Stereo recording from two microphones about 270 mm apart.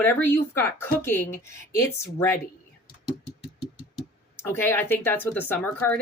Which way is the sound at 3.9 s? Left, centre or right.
Centre.